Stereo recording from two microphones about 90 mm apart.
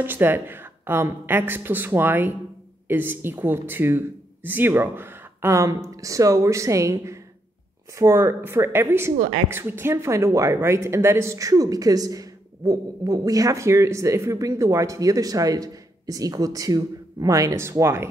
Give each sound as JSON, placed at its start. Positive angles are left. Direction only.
{"t": 0.0, "sound": "a woman's voice", "side_deg": -25}